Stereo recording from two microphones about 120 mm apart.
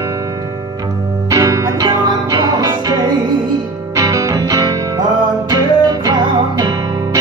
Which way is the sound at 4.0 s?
30° right (ahead or behind).